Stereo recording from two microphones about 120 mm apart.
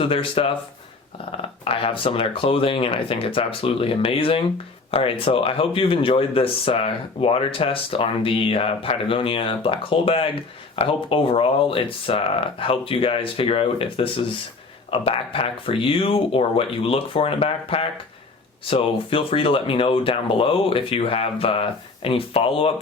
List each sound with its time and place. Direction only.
0.0 s speech: 50° left (ahead or behind)